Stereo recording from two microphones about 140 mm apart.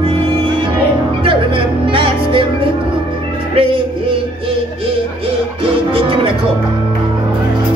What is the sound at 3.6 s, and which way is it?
Music, 40° right (ahead or behind).